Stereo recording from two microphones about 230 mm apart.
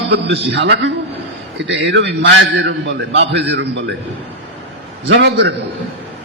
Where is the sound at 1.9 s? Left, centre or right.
Right.